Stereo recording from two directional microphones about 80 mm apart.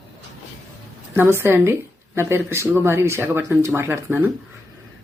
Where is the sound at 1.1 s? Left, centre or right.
Right.